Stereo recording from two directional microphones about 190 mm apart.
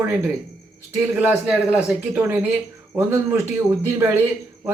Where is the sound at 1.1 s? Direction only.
5° right (ahead or behind).